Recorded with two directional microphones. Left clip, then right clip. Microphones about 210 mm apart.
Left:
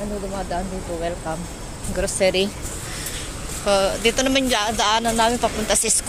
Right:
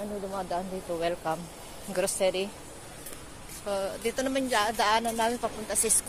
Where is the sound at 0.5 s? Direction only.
45° right (ahead or behind).